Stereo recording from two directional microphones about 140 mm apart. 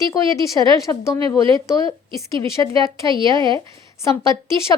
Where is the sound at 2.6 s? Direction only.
25° left (ahead or behind).